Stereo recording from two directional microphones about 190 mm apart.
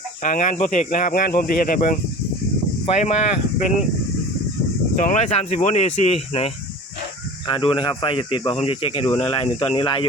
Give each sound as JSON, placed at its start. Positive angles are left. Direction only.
{"t": 0.2, "sound": "speech", "side_deg": 40}
{"t": 4.9, "sound": "speech", "side_deg": 40}